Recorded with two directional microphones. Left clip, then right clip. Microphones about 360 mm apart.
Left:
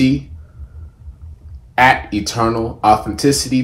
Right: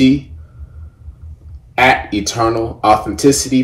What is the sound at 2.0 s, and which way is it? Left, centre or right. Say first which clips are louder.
Speech: right 2 dB; centre.